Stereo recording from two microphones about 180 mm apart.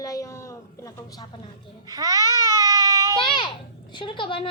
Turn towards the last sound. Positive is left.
turn(degrees=30)  # may be behind; listen again after turning